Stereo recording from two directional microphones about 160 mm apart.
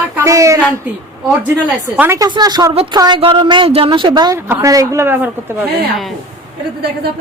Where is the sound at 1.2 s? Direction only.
5° right (ahead or behind).